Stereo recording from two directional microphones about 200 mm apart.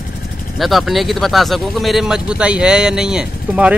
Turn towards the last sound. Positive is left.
turn(degrees=-5)  # may be behind; listen again after turning